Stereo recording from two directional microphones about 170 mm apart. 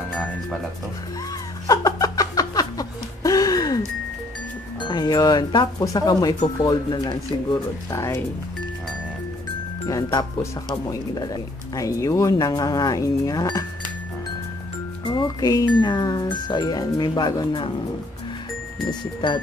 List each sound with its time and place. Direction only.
1.7 s chuckle: 20° left (ahead or behind)
4.8 s speech: 25° left (ahead or behind)
10.1 s speech: 20° left (ahead or behind)
15.0 s speech: 25° left (ahead or behind)
18.9 s speech: 25° left (ahead or behind)